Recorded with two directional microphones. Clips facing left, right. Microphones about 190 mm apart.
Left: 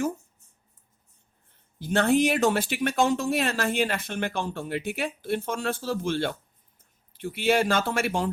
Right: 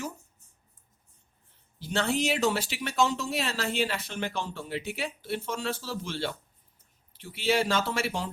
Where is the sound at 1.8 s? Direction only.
55° left (ahead or behind).